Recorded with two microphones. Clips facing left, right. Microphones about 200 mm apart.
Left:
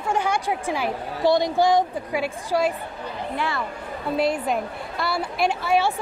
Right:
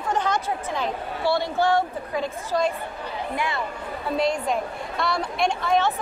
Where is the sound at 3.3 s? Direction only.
15° right (ahead or behind).